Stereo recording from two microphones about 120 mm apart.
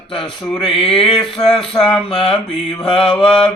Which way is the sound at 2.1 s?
50° left (ahead or behind).